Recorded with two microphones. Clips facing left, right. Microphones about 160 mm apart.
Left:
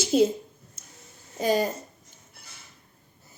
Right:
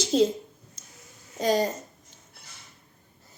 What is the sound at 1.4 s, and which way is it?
Speech, 10° left (ahead or behind).